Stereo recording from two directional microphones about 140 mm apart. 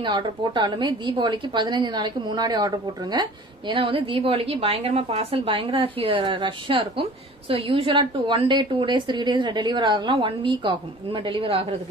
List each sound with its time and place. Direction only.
0.0 s a woman's voice: 35° right (ahead or behind)